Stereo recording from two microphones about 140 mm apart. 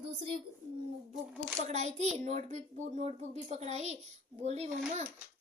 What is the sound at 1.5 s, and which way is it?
A child's voice, 55° right (ahead or behind).